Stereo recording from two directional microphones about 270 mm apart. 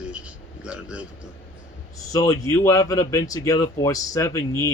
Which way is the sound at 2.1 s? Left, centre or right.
Centre.